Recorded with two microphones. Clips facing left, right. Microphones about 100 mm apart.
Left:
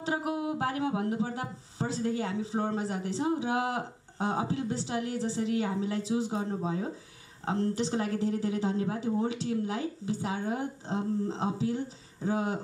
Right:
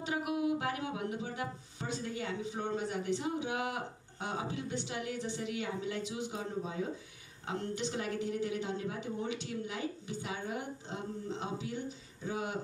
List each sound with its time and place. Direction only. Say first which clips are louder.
0.0 s speech: left 2 dB; 30° left (ahead or behind)